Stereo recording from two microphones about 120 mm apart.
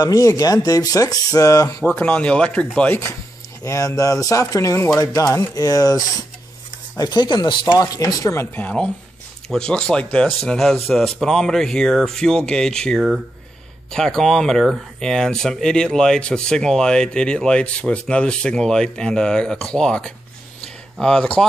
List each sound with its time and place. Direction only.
0.0 s speech: 30° left (ahead or behind)
1.9 s speech: 10° left (ahead or behind)
3.6 s speech: 30° left (ahead or behind)
8.5 s speech: 10° left (ahead or behind)
20.6 s a sound: 5° left (ahead or behind)